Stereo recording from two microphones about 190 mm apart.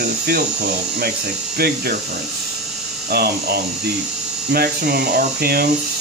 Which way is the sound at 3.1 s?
55° right (ahead or behind).